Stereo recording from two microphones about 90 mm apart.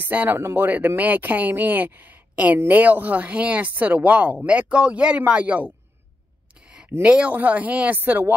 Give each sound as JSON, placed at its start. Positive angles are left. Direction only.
{"t": 0.0, "sound": "speech", "side_deg": -20}
{"t": 0.4, "sound": "speech", "side_deg": -30}
{"t": 0.7, "sound": "speech", "side_deg": -20}
{"t": 7.0, "sound": "speech", "side_deg": -15}